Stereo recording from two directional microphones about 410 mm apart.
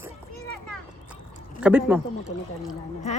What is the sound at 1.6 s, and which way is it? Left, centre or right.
Speech, centre.